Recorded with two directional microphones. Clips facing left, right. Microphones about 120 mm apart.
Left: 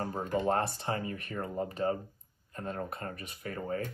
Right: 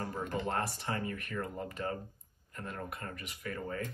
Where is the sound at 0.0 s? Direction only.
35° left (ahead or behind).